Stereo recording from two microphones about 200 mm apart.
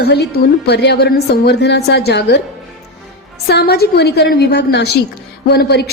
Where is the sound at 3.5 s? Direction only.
55° left (ahead or behind).